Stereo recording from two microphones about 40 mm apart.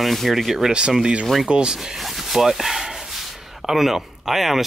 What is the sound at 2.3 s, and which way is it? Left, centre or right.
Speech, centre.